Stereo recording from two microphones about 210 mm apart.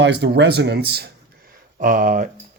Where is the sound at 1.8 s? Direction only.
40° right (ahead or behind).